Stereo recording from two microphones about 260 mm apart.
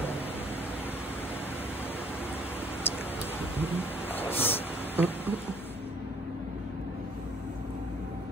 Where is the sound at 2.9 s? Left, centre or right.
Left.